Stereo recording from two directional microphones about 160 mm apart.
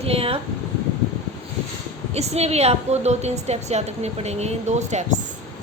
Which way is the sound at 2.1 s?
40° right (ahead or behind).